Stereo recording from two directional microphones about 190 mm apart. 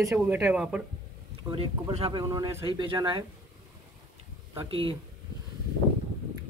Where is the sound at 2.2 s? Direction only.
15° right (ahead or behind).